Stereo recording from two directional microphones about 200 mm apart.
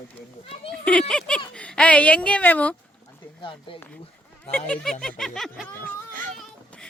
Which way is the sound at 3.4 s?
25° left (ahead or behind).